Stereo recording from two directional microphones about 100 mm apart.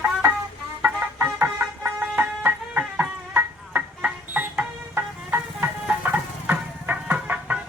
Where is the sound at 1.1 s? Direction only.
20° right (ahead or behind).